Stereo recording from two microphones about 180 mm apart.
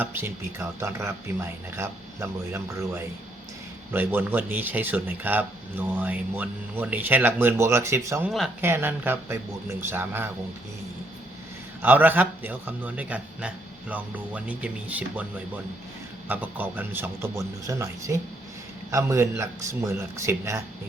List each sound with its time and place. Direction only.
0.0 s speech: 10° right (ahead or behind)
11.8 s speech: 10° right (ahead or behind)
16.3 s speech: 10° right (ahead or behind)